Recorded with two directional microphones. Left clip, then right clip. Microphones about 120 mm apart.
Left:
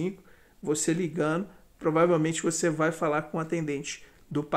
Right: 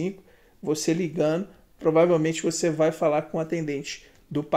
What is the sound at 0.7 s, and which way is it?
A man's voice, 20° right (ahead or behind).